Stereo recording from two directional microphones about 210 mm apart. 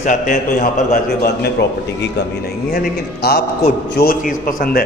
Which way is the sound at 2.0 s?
50° left (ahead or behind).